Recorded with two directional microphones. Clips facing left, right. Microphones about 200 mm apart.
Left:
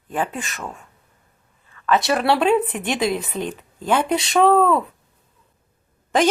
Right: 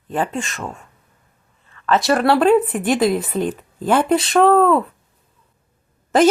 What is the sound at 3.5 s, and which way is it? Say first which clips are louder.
Speech: even; 45° right (ahead or behind).